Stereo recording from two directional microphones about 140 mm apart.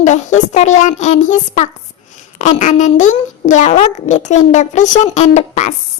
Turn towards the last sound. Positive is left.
turn(degrees=55)  # may be behind; listen again after turning